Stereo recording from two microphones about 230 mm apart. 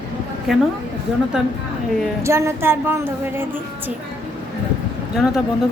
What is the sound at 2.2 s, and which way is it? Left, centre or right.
A woman's voice, centre.